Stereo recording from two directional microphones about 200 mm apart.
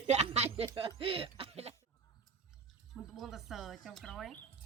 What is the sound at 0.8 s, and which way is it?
Speech, 30° right (ahead or behind).